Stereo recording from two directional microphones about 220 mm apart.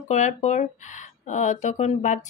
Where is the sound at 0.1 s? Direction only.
35° left (ahead or behind).